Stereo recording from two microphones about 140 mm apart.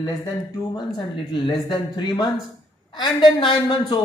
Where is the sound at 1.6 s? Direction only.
30° left (ahead or behind).